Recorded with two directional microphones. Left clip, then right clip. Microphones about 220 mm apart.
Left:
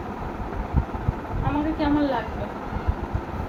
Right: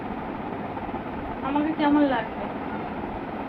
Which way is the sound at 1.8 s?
15° left (ahead or behind).